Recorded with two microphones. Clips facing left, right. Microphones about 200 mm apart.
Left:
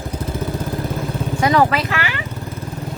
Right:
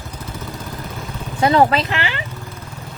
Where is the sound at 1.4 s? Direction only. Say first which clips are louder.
Right 2 dB; 25° right (ahead or behind).